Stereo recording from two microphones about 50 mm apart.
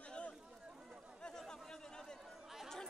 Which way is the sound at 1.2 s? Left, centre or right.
Centre.